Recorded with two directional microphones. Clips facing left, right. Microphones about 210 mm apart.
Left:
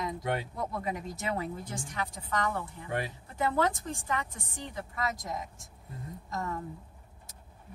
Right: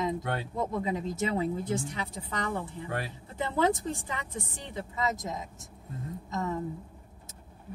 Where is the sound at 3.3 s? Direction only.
20° right (ahead or behind).